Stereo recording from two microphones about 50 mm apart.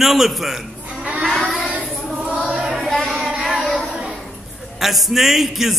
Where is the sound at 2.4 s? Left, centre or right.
Centre.